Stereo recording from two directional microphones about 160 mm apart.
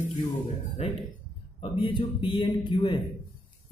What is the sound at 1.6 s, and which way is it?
A man's voice, 30° left (ahead or behind).